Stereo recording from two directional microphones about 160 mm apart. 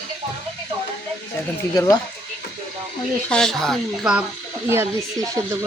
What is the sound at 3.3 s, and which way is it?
Speech, 5° left (ahead or behind).